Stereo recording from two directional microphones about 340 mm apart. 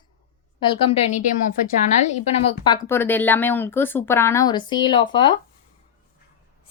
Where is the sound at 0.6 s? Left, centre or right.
Centre.